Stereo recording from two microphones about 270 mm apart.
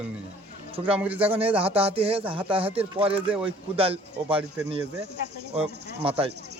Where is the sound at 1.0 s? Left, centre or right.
Centre.